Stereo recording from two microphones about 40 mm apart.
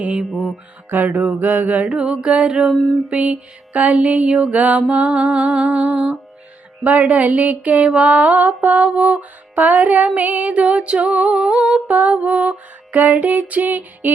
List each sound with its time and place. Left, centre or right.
0.0 s music: right
0.9 s a sound: right
2.0 s music: right
4.9 s music: right
11.9 s music: right